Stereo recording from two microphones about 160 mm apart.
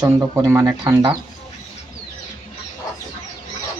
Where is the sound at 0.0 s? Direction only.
15° right (ahead or behind).